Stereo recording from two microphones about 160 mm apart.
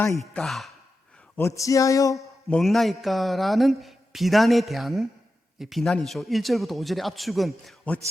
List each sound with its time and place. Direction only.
0.2 s speech: centre (ahead or behind)
1.4 s speech: 20° left (ahead or behind)
2.1 s speech: centre (ahead or behind)